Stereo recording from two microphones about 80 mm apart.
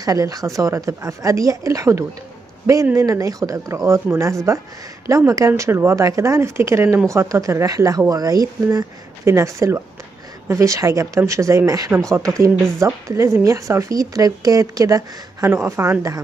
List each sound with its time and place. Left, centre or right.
0.0 s speech: right
9.2 s speech: right
15.4 s speech: right